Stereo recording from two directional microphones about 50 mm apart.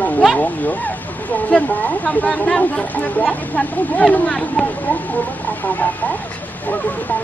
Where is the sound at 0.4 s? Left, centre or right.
Left.